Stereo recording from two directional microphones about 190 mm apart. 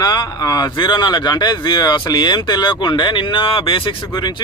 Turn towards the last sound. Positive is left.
turn(degrees=25)  # may be behind; listen again after turning